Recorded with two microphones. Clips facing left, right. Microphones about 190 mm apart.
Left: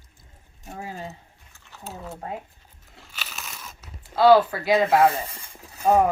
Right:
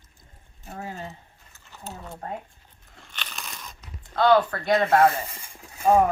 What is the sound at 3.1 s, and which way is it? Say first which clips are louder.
Crunch: even; 5° left (ahead or behind).